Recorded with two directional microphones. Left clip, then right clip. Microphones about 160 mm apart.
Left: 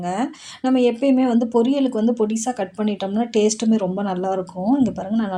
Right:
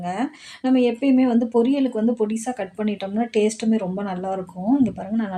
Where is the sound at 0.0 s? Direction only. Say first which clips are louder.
Left 2 dB; 40° left (ahead or behind).